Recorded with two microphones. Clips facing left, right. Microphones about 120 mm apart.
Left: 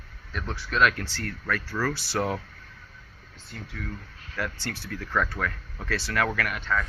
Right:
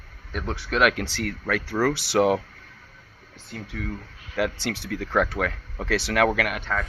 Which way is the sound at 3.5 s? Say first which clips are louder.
Right 5 dB; 65° right (ahead or behind).